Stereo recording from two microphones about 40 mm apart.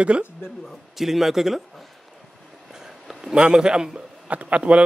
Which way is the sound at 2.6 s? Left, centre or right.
Centre.